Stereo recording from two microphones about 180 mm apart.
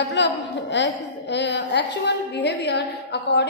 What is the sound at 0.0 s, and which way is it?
A woman's voice, 75° left (ahead or behind).